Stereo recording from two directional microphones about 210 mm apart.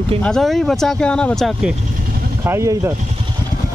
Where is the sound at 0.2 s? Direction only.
Centre (ahead or behind).